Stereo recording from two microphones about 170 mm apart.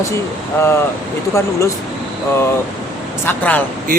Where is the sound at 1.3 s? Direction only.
15° left (ahead or behind).